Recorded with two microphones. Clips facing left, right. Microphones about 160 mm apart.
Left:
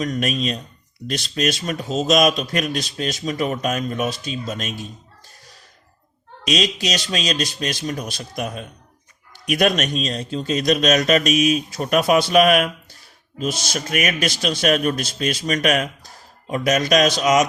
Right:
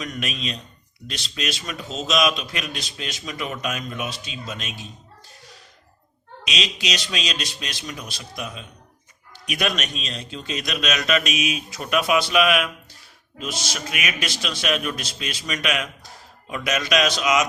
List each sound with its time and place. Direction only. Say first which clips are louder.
0.0 s speech: left 8 dB; 40° left (ahead or behind)
6.4 s a man's voice: left 7 dB; 45° left (ahead or behind)